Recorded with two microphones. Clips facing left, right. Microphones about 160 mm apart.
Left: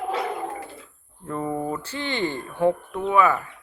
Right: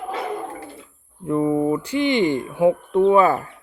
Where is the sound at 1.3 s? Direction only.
15° right (ahead or behind).